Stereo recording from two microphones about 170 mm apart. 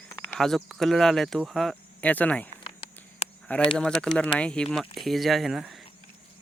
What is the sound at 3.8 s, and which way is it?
Speech, 5° left (ahead or behind).